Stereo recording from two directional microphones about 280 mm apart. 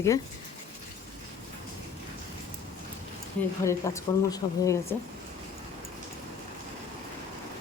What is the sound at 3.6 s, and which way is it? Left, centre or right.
Speech, centre.